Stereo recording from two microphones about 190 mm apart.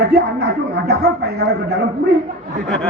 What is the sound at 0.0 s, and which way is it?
Speech, 60° right (ahead or behind).